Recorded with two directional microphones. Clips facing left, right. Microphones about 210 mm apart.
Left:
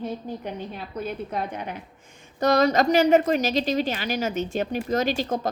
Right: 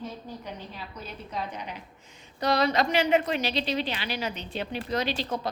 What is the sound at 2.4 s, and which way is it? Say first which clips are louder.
A woman's voice: left 5 dB; 45° left (ahead or behind).